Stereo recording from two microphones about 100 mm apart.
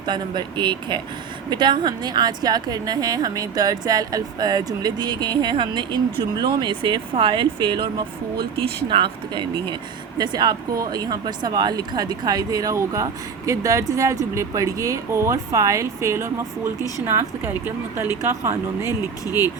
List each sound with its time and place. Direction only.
0.0 s a woman's voice: 50° right (ahead or behind); by 18.9 s 30° right (ahead or behind)